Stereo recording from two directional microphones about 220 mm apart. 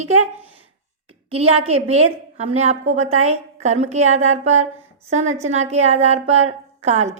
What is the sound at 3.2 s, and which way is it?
A woman's voice, 30° right (ahead or behind).